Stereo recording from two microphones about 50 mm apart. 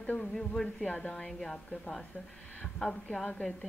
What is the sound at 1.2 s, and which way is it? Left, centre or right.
Speech, centre.